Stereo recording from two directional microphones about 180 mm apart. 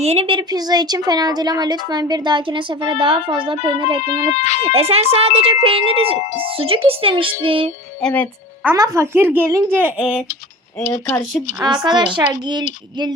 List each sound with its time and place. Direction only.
0.0 s speech: 35° right (ahead or behind)
4.0 s speech: 40° left (ahead or behind)
4.6 s speech: 35° right (ahead or behind)
8.0 s speech: 10° left (ahead or behind)
8.6 s speech: 15° right (ahead or behind)
10.8 s speech: 15° left (ahead or behind)
11.6 s speech: 25° right (ahead or behind)